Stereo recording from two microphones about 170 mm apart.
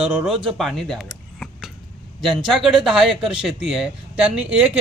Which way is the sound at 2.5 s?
Centre (ahead or behind).